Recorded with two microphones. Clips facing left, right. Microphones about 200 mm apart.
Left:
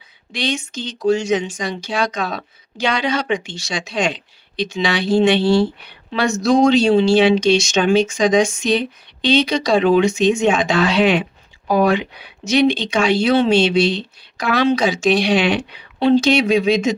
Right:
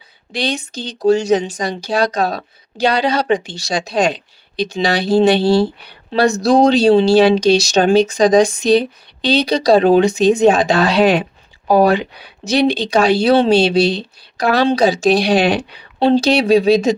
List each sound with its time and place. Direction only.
0.3 s speech: 35° right (ahead or behind)